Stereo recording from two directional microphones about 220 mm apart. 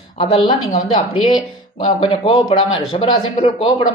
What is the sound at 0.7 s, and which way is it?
A woman's voice, 35° left (ahead or behind).